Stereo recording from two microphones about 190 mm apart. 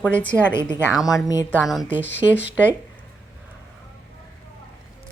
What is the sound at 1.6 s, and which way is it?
Speech, centre (ahead or behind).